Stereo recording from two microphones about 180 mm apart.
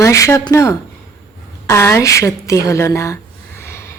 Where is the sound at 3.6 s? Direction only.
15° left (ahead or behind).